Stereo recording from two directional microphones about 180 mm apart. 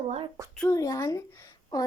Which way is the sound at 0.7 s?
20° left (ahead or behind).